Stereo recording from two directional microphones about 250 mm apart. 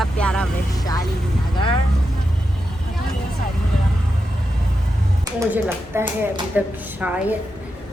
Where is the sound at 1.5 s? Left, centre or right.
Centre.